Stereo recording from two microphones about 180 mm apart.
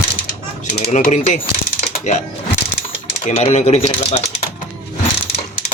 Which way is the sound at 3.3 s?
40° left (ahead or behind).